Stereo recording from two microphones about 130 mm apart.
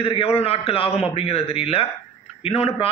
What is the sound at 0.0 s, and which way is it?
A man's voice, 50° left (ahead or behind).